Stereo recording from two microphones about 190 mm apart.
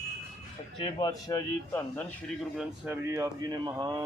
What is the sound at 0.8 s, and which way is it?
A man's voice, 20° left (ahead or behind).